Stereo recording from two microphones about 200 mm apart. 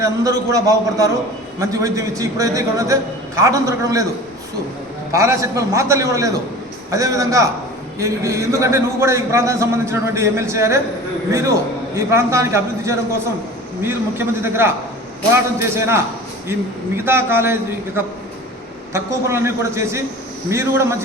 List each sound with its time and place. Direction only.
0.0 s a man's voice: 15° right (ahead or behind)
5.1 s a man's voice: 15° right (ahead or behind)